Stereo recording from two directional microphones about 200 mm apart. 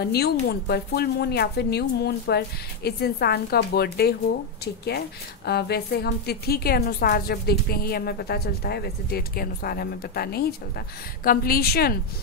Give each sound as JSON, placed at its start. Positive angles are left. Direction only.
{"t": 0.0, "sound": "a woman's voice", "side_deg": 55}